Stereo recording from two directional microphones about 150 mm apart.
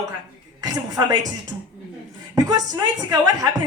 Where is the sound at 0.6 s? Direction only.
25° right (ahead or behind).